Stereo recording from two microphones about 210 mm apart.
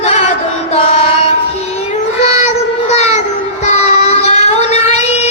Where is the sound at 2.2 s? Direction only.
30° left (ahead or behind).